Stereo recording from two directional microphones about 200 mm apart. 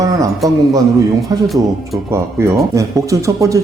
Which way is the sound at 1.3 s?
15° right (ahead or behind).